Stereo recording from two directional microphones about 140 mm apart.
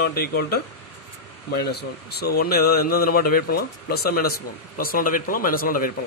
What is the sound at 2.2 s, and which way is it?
Speech, 90° left.